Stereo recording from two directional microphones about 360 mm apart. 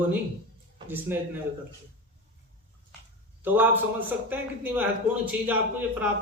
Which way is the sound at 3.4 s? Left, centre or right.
Centre.